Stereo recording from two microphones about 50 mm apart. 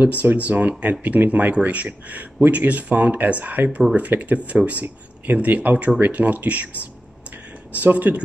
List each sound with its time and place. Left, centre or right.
0.0 s speech: right